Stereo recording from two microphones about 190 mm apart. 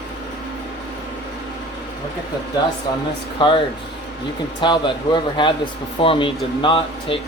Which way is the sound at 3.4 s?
25° left (ahead or behind).